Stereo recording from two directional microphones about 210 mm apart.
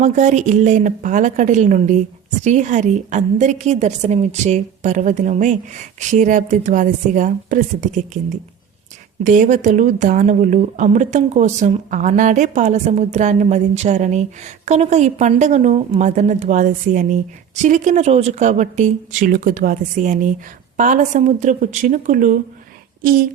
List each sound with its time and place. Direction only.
0.0 s speech: 35° right (ahead or behind)